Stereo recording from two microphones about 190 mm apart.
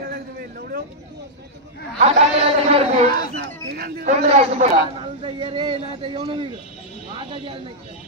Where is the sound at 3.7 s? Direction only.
50° right (ahead or behind).